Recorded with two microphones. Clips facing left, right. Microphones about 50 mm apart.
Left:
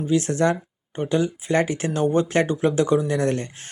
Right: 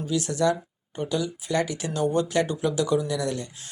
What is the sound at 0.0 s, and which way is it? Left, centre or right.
Speech, left.